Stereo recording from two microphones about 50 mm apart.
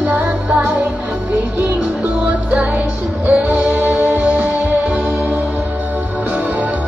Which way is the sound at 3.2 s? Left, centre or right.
Right.